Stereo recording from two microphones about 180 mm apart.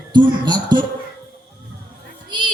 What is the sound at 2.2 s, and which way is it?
Music, 25° right (ahead or behind).